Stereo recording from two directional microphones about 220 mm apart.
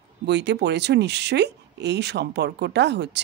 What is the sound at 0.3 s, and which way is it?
Speech, 50° right (ahead or behind).